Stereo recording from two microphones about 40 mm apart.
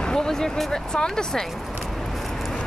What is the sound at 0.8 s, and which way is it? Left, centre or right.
Speech, centre.